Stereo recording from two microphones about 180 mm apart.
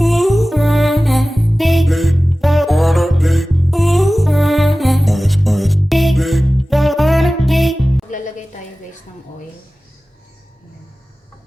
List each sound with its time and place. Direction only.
0.0 s music: centre (ahead or behind)
8.1 s music: 45° left (ahead or behind)